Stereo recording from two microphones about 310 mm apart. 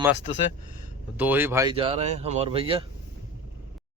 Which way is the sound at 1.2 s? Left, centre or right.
Centre.